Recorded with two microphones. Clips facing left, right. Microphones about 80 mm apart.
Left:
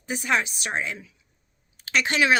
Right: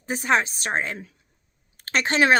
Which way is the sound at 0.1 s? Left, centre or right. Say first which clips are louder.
Right 3 dB; right.